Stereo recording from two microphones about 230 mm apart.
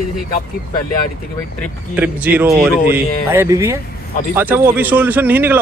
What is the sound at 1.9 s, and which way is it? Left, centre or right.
Speech, centre.